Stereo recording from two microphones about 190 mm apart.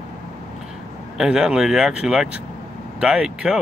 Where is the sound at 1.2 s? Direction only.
5° right (ahead or behind).